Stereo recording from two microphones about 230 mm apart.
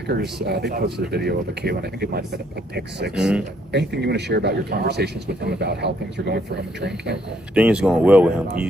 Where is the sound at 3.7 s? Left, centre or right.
Right.